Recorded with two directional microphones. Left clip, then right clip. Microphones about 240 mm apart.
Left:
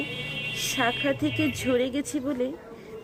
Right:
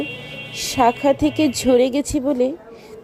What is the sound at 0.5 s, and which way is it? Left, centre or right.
A woman's voice, centre.